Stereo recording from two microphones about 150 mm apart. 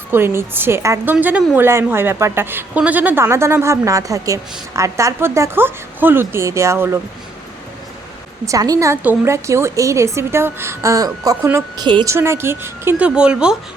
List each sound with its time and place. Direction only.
0.1 s a woman's voice: 15° right (ahead or behind)
8.4 s a woman's voice: 25° right (ahead or behind); by 13.6 s 5° right (ahead or behind)